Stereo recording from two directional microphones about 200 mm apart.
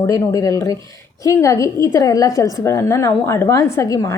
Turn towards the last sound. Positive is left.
turn(degrees=15)  # may be behind; listen again after turning